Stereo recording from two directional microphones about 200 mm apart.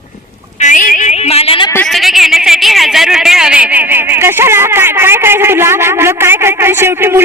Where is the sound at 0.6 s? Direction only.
40° left (ahead or behind).